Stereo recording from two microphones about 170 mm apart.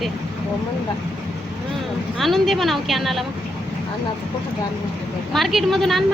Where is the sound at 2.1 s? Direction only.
Centre (ahead or behind).